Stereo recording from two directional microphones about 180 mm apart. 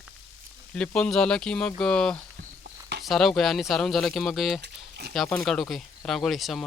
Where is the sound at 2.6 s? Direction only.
65° right (ahead or behind).